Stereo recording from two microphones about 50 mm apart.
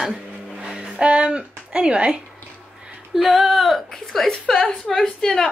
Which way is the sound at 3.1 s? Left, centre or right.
Centre.